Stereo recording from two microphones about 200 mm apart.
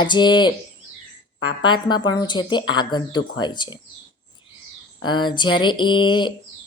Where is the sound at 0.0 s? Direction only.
20° left (ahead or behind).